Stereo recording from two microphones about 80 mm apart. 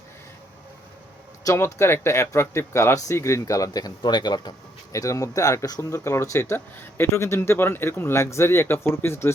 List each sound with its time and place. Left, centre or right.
1.5 s a man's voice: left
4.9 s a man's voice: left